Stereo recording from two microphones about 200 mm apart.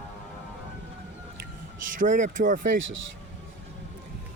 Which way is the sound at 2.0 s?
40° right (ahead or behind).